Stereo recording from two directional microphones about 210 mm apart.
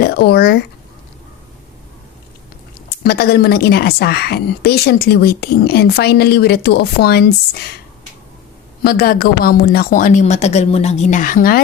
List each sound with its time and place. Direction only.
0.0 s speech: 50° left (ahead or behind)
3.0 s a woman's voice: 50° left (ahead or behind)
8.8 s speech: 45° left (ahead or behind)